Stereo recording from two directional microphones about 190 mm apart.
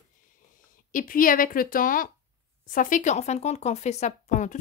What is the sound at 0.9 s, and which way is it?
Speech, 45° left (ahead or behind).